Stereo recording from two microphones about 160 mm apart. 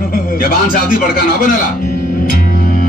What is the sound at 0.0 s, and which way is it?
Music, 65° left (ahead or behind).